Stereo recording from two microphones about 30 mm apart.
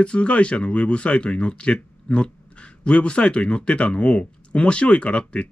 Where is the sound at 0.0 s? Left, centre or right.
Left.